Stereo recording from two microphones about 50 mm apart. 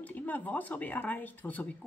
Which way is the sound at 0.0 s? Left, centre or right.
Left.